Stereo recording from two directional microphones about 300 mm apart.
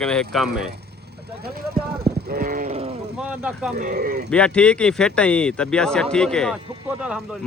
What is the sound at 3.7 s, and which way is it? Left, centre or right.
Speech, right.